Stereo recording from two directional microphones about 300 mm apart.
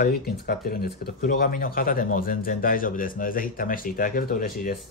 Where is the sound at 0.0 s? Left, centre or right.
Left.